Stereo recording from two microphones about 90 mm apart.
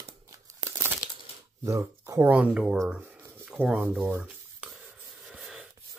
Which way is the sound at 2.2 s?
15° right (ahead or behind).